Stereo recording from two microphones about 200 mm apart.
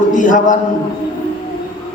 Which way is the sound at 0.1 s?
40° left (ahead or behind).